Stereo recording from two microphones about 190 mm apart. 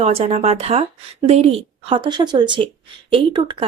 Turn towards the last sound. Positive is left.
turn(degrees=-25)  # may be behind; listen again after turning